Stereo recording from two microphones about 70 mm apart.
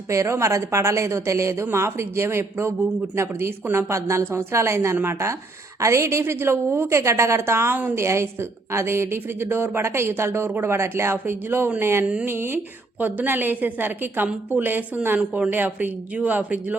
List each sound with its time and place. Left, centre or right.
0.1 s a woman's voice: right
3.9 s a woman's voice: right